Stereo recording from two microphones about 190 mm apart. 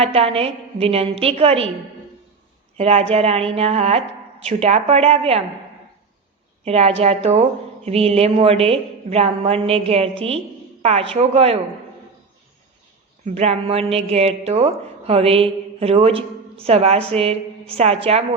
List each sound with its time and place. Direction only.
0.0 s a woman's voice: 30° right (ahead or behind)
2.7 s a woman's voice: 35° right (ahead or behind)
6.7 s a woman's voice: 35° right (ahead or behind)
13.2 s a woman's voice: 35° right (ahead or behind)